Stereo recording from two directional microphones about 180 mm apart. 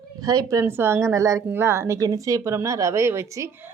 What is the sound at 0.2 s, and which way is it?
Speech, 20° right (ahead or behind).